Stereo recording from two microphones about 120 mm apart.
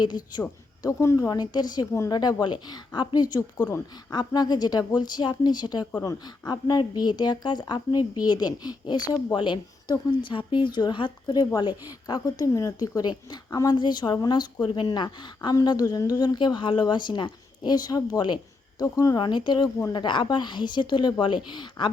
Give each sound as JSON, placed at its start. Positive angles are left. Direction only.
{"t": 0.8, "sound": "speech", "side_deg": 25}